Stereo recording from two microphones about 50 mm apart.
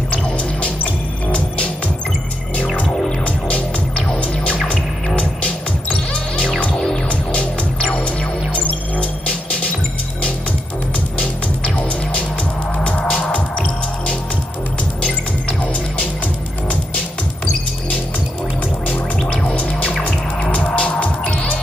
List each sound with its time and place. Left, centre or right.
0.1 s music: left
2.5 s music: left
11.1 s music: left
19.4 s music: left